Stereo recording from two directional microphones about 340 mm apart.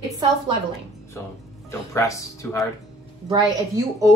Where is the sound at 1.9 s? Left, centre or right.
Centre.